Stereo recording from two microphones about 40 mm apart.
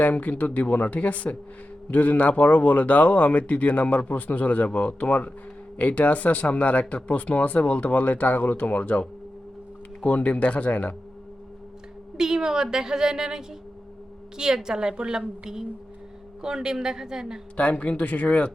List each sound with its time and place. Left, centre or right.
0.0 s speech: left
12.1 s a woman's voice: centre
17.6 s speech: left